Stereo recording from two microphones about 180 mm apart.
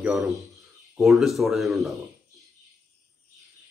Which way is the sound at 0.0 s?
Centre (ahead or behind).